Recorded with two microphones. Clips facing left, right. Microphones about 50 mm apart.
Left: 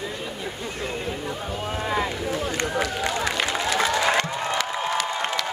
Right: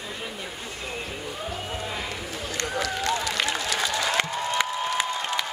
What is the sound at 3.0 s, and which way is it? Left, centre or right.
Run, centre.